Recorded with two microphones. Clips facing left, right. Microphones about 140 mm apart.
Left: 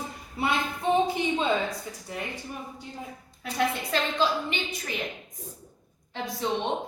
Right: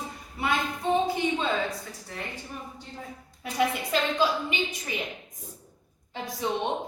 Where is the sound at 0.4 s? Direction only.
25° left (ahead or behind).